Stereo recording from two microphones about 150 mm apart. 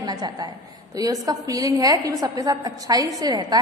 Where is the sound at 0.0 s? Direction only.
25° right (ahead or behind).